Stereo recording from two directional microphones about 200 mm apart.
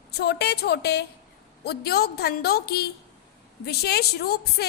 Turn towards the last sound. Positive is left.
turn(degrees=55)  # may be behind; listen again after turning